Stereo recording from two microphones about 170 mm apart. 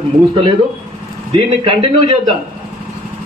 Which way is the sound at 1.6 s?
30° right (ahead or behind).